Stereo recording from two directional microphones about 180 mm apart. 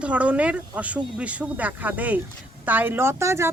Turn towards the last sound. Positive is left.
turn(degrees=-15)  # may be behind; listen again after turning